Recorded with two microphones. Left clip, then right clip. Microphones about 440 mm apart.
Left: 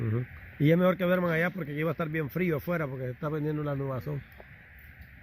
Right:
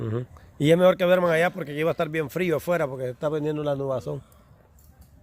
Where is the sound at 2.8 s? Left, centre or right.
Right.